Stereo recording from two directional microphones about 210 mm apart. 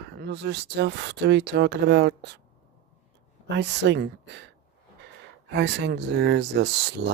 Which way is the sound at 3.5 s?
55° right (ahead or behind).